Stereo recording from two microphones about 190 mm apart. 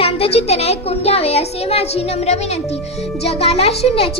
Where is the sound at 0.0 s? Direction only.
30° left (ahead or behind).